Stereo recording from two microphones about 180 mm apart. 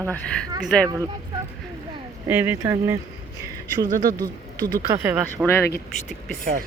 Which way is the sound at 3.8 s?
50° right (ahead or behind).